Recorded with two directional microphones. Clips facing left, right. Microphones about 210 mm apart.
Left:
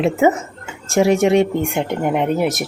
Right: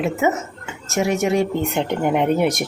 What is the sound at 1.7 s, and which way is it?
Speech, 5° left (ahead or behind).